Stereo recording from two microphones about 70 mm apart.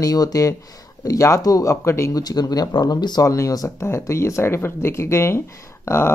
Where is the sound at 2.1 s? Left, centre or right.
Left.